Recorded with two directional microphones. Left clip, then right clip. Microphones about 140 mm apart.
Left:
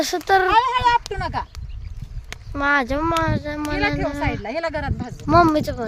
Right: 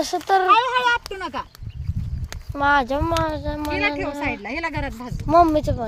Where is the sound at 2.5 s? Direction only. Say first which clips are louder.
Right 1 dB; 20° left (ahead or behind).